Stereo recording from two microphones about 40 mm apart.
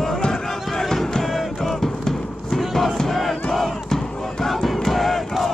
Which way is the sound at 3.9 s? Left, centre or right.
Centre.